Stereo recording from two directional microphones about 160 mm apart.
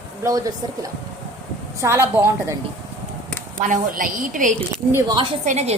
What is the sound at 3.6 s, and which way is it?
Speech, 55° right (ahead or behind).